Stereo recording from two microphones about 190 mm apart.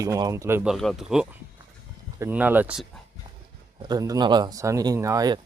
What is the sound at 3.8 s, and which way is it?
Speech, 20° right (ahead or behind).